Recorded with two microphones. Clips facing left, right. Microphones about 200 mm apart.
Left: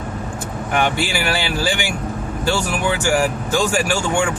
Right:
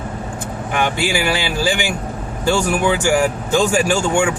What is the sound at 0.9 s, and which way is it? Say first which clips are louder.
Speech: right 2 dB; 15° right (ahead or behind).